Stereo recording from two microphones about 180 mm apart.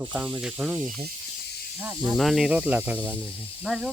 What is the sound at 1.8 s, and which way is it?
Speech, 15° right (ahead or behind).